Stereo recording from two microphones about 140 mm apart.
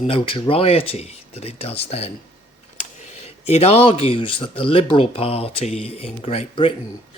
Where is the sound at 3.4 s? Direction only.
45° left (ahead or behind).